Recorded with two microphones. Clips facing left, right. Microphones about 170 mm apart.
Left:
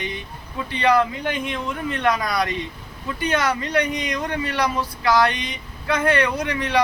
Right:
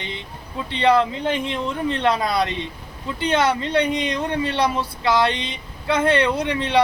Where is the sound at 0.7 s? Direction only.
25° right (ahead or behind).